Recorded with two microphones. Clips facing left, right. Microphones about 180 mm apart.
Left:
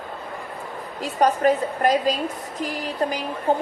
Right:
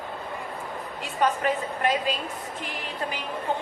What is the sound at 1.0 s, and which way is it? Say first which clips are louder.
A woman's voice: left 6 dB; 40° left (ahead or behind).